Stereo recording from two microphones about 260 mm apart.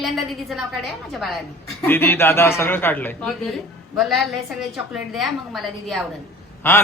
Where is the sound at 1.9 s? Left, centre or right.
Centre.